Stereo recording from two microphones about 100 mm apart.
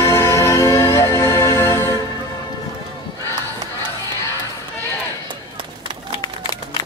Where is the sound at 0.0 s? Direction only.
25° left (ahead or behind).